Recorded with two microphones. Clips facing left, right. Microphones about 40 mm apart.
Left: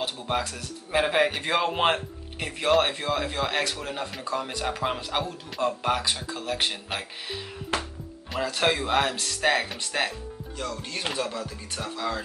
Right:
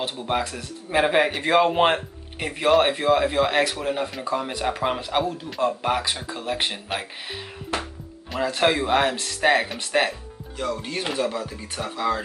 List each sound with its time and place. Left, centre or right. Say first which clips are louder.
0.0 s speech: right 3 dB; centre
8.5 s speech: right 4 dB; centre